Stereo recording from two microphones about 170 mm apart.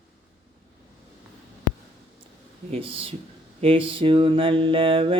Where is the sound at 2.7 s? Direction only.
30° right (ahead or behind).